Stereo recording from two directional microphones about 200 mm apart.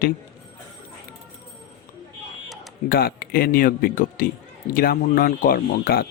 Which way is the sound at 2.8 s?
50° left (ahead or behind).